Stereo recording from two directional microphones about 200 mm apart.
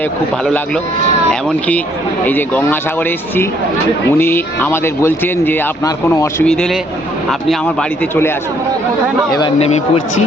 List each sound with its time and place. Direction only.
0.4 s speech: 5° left (ahead or behind)
6.4 s speech: 5° left (ahead or behind)
9.6 s speech: 35° left (ahead or behind)